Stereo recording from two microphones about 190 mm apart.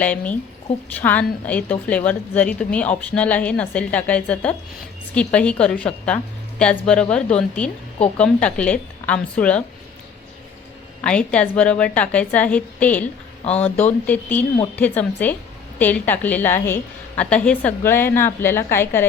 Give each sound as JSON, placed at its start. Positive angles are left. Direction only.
{"t": 0.0, "sound": "a woman's voice", "side_deg": 5}
{"t": 11.0, "sound": "a woman's voice", "side_deg": 5}
{"t": 13.4, "sound": "speech", "side_deg": 35}
{"t": 14.1, "sound": "a woman's voice", "side_deg": 10}